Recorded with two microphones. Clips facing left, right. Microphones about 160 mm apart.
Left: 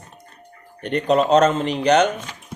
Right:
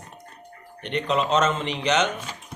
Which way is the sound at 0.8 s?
40° left (ahead or behind).